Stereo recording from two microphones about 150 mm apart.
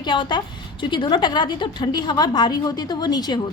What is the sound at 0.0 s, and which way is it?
A woman's voice, 30° left (ahead or behind).